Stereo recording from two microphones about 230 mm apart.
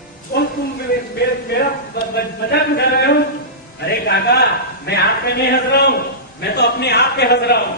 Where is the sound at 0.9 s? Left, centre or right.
Left.